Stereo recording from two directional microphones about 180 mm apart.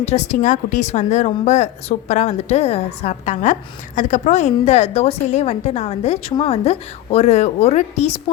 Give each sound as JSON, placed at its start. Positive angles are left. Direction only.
{"t": 0.0, "sound": "a woman's voice", "side_deg": 40}